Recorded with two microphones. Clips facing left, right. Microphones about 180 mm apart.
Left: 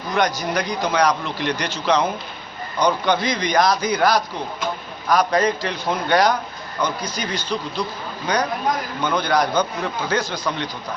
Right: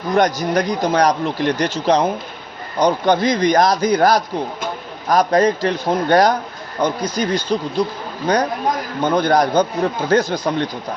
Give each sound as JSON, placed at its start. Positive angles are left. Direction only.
{"t": 0.1, "sound": "speech", "side_deg": -50}
{"t": 9.0, "sound": "speech", "side_deg": -50}